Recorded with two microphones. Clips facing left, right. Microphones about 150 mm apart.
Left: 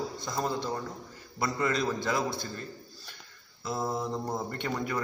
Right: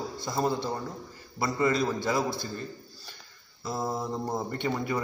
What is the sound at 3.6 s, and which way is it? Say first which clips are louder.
Speech: even; centre (ahead or behind).